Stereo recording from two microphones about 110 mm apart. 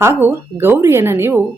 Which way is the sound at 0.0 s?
20° right (ahead or behind).